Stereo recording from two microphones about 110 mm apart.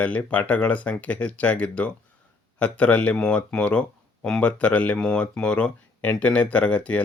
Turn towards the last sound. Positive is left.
turn(degrees=10)  # may be behind; listen again after turning